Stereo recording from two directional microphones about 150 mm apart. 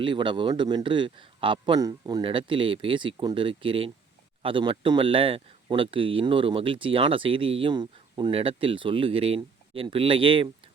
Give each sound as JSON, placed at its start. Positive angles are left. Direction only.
{"t": 0.0, "sound": "speech", "side_deg": -35}